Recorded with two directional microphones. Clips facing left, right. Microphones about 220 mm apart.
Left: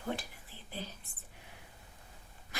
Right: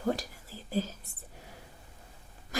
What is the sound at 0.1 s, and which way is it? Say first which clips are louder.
Whispering: right 6 dB; 40° right (ahead or behind).